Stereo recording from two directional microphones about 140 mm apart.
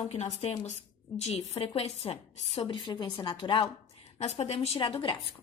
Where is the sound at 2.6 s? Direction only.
30° left (ahead or behind).